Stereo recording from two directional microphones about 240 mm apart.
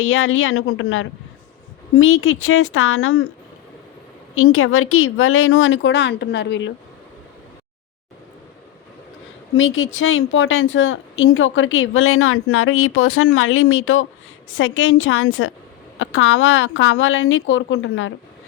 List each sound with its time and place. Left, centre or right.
0.0 s a woman's voice: left
4.4 s a woman's voice: left
9.6 s a woman's voice: left